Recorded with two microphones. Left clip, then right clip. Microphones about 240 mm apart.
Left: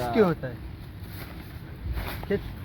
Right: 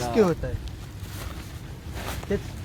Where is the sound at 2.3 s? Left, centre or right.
Left.